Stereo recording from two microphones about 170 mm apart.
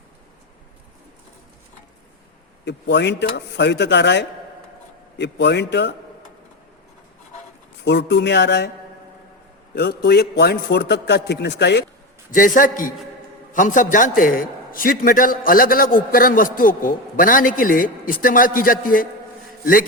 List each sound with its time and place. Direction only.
2.6 s speech: 90° left
7.9 s speech: 90° left
9.7 s a man's voice: 70° left (ahead or behind); by 11.9 s 90° left
12.3 s a man's voice: 50° left (ahead or behind)